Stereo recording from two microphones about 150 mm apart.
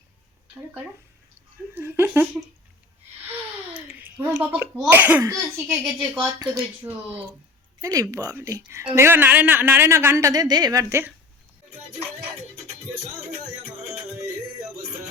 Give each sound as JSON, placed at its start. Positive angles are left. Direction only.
{"t": 1.7, "sound": "a woman's voice", "side_deg": -15}
{"t": 3.8, "sound": "a sound", "side_deg": -10}
{"t": 4.9, "sound": "a woman's voice", "side_deg": -15}
{"t": 5.6, "sound": "speech", "side_deg": -5}
{"t": 6.4, "sound": "speech", "side_deg": -25}
{"t": 6.9, "sound": "a woman's voice", "side_deg": -15}